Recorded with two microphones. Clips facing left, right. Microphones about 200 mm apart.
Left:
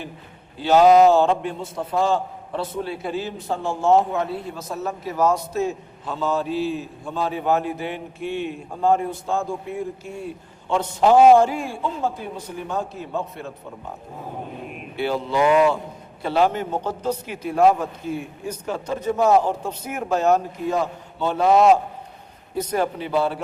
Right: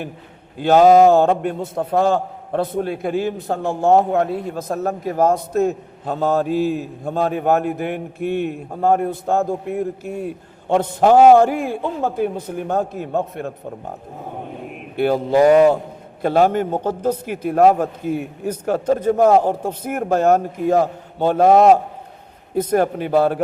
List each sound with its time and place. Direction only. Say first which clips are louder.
0.6 s a man's voice: right 3 dB; 50° right (ahead or behind)
14.9 s a man's voice: right 7 dB; 50° right (ahead or behind)